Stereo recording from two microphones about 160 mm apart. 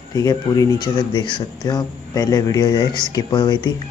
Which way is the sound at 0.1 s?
25° left (ahead or behind).